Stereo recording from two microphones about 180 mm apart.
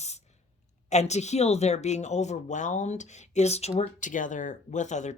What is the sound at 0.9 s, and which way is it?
Speech, 40° left (ahead or behind).